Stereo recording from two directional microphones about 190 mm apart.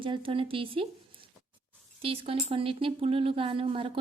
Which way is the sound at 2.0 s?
30° right (ahead or behind).